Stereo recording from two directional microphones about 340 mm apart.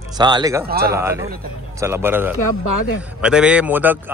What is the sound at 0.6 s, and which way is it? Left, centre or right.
Speech, right.